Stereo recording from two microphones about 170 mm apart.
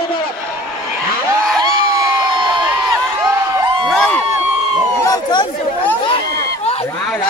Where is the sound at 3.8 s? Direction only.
5° left (ahead or behind).